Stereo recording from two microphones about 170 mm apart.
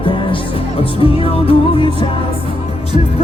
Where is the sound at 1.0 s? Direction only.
35° left (ahead or behind).